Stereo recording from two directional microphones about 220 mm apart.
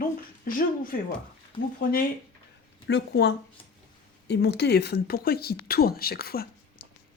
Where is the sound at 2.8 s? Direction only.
50° left (ahead or behind).